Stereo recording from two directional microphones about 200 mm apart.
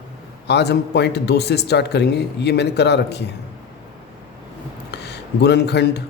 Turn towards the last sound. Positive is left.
turn(degrees=55)  # may be behind; listen again after turning